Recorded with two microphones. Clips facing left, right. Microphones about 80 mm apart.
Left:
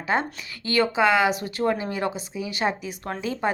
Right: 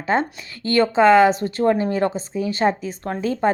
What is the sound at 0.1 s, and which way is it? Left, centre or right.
A woman's voice, right.